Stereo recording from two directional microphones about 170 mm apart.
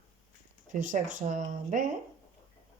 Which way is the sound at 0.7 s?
50° right (ahead or behind).